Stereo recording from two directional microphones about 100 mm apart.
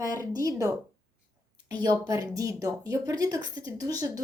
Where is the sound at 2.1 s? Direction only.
30° right (ahead or behind).